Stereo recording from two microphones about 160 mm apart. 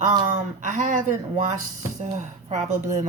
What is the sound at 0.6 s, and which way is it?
A woman's voice, 55° right (ahead or behind).